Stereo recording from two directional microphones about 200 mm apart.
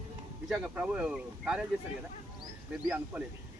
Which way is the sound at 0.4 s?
5° right (ahead or behind).